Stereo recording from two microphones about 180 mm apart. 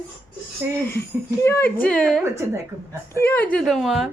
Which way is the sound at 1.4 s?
10° left (ahead or behind).